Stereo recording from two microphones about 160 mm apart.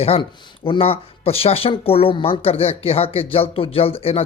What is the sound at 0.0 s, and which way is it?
Speech, 35° left (ahead or behind).